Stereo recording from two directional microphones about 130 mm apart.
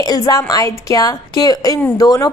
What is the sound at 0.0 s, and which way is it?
A woman's voice, 30° left (ahead or behind).